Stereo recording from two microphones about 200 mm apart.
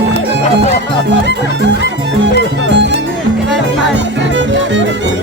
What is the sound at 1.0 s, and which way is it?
Speech, 60° right (ahead or behind).